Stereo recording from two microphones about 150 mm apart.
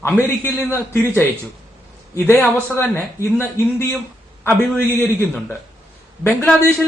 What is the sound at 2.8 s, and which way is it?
A man's voice, 15° left (ahead or behind).